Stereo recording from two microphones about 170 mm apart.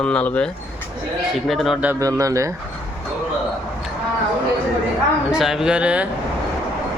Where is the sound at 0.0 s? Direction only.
5° left (ahead or behind).